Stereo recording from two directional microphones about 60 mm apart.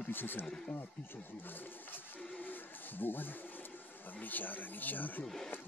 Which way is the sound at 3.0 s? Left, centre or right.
Left.